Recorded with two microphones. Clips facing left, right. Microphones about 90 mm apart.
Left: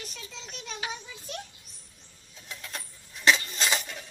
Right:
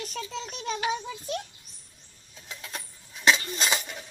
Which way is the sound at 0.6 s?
55° right (ahead or behind).